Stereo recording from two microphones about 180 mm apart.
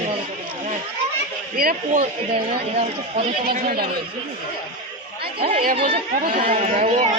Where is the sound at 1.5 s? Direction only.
50° right (ahead or behind).